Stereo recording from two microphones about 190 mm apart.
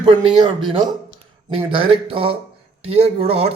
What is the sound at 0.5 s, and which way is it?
A man's voice, 25° right (ahead or behind).